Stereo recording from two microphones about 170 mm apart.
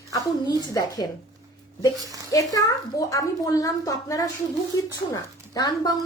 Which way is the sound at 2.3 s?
20° left (ahead or behind).